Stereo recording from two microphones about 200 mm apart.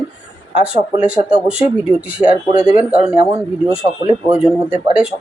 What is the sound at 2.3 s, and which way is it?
Speech, 30° right (ahead or behind).